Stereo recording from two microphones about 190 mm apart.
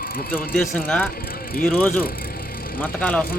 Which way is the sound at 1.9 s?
50° left (ahead or behind).